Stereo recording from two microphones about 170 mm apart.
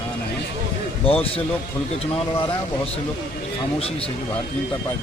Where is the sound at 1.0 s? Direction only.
35° left (ahead or behind).